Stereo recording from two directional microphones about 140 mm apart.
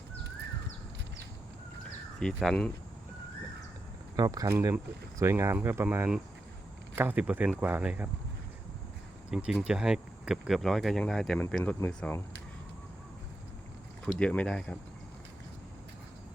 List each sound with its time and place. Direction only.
2.1 s speech: 5° left (ahead or behind)
4.2 s speech: 25° right (ahead or behind); by 8.1 s 10° right (ahead or behind)
9.3 s speech: 5° right (ahead or behind)
14.0 s speech: 5° left (ahead or behind)